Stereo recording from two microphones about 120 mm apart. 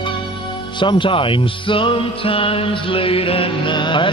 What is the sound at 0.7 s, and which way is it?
Speech, 40° left (ahead or behind).